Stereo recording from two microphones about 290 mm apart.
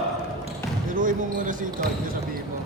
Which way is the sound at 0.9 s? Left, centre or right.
Right.